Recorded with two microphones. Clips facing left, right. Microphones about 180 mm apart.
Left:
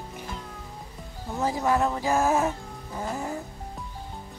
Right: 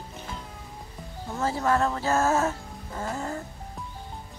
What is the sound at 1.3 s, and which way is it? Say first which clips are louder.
Speech: even; 15° left (ahead or behind).